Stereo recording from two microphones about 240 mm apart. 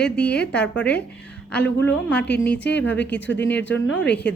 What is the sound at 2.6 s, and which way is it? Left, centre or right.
Speech, left.